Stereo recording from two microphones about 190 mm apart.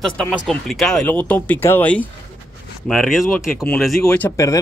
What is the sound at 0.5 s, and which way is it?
Speech, centre (ahead or behind).